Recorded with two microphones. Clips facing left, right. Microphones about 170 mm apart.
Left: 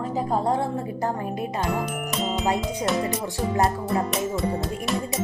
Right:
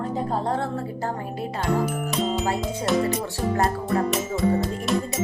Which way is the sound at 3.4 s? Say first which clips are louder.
Left 2 dB; centre (ahead or behind).